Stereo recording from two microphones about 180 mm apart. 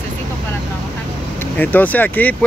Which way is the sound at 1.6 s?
10° left (ahead or behind).